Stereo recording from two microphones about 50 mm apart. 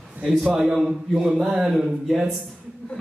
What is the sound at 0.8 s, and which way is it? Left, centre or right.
Speech, centre.